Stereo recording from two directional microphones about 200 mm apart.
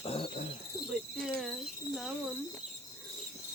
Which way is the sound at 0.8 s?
Centre (ahead or behind).